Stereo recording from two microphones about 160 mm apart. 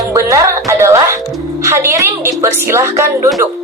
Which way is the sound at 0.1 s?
20° right (ahead or behind).